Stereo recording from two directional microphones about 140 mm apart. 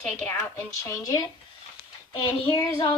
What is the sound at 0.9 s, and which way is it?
Speech, 25° left (ahead or behind).